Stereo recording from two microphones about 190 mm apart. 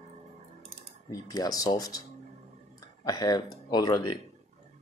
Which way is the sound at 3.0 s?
20° left (ahead or behind).